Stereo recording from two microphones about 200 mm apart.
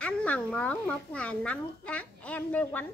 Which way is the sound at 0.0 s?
5° left (ahead or behind).